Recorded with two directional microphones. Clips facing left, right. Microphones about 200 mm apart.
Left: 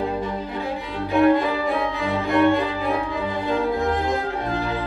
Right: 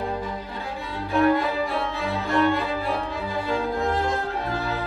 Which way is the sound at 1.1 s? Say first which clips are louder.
Left 3 dB; 15° left (ahead or behind).